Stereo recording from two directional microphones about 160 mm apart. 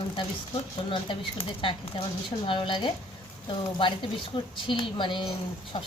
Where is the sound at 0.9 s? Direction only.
35° left (ahead or behind).